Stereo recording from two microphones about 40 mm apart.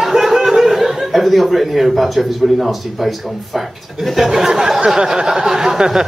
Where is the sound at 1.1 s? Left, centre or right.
Centre.